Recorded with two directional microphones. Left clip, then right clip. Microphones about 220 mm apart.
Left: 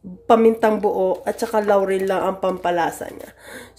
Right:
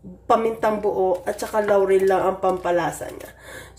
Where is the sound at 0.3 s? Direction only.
45° left (ahead or behind).